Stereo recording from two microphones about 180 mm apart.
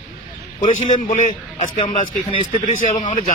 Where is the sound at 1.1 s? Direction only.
45° left (ahead or behind).